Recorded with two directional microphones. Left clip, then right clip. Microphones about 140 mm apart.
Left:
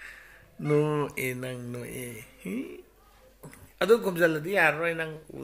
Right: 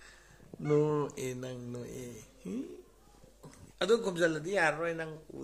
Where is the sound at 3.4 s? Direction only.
30° left (ahead or behind).